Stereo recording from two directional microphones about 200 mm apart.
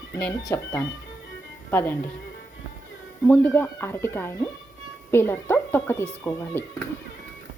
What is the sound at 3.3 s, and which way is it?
Speech, 10° left (ahead or behind).